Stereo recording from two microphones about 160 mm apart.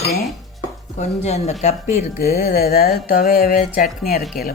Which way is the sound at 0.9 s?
45° left (ahead or behind).